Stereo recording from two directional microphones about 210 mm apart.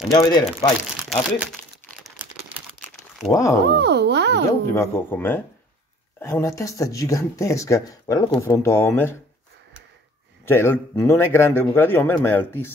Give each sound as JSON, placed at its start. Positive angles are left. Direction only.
{"t": 0.1, "sound": "speech", "side_deg": 20}
{"t": 1.0, "sound": "speech", "side_deg": 0}
{"t": 2.8, "sound": "crumpling", "side_deg": 10}
{"t": 3.6, "sound": "a sound", "side_deg": -55}
{"t": 4.7, "sound": "speech", "side_deg": 10}
{"t": 10.4, "sound": "speech", "side_deg": 10}